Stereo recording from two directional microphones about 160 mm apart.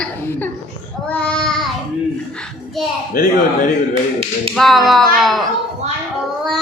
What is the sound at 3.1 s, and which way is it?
Speech, 65° left (ahead or behind).